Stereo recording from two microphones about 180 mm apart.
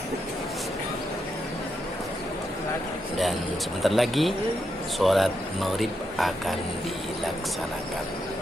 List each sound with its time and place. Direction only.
3.8 s speech: centre (ahead or behind)